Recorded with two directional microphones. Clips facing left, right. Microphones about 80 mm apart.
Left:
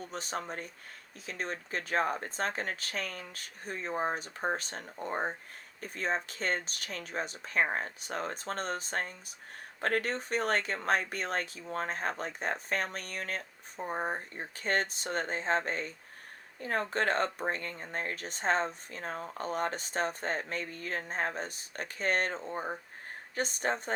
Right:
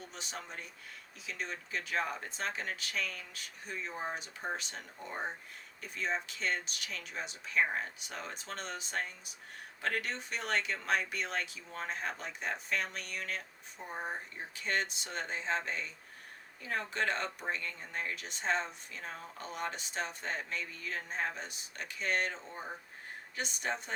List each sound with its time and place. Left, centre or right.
0.1 s speech: left